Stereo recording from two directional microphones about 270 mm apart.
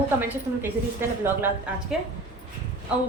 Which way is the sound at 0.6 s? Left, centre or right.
Centre.